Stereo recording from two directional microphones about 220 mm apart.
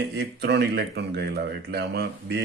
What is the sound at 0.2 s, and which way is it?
Speech, 50° right (ahead or behind).